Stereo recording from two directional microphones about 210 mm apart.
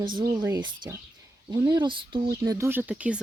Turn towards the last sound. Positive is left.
turn(degrees=-5)  # may be behind; listen again after turning